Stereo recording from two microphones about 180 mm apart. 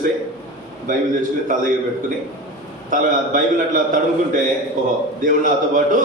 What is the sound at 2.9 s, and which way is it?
A man's voice, 45° right (ahead or behind).